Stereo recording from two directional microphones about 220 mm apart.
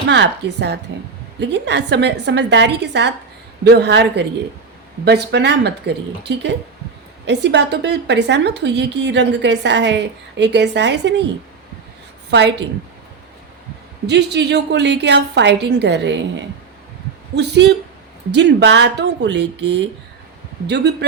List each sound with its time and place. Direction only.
0.1 s a woman's voice: 50° right (ahead or behind)
12.3 s a woman's voice: 50° right (ahead or behind)
14.1 s a woman's voice: 50° right (ahead or behind)
17.3 s a woman's voice: 50° right (ahead or behind)